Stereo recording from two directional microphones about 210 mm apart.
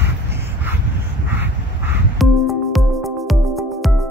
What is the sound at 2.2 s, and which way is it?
Music, centre (ahead or behind).